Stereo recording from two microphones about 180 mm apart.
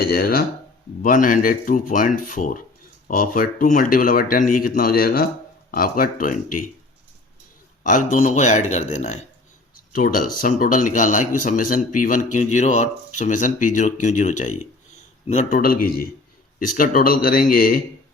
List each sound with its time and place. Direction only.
0.0 s speech: 55° left (ahead or behind)
7.9 s speech: 45° left (ahead or behind)
9.9 s speech: 50° left (ahead or behind)